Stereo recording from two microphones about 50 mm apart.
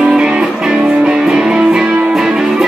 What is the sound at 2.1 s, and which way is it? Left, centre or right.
Music, centre.